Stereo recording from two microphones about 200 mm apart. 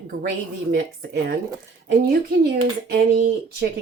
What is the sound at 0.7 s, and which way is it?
Speech, 50° right (ahead or behind).